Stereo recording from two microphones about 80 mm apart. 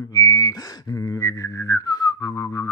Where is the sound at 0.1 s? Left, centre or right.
Left.